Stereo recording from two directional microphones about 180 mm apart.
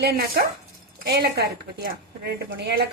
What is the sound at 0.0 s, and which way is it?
A woman's voice, 60° right (ahead or behind).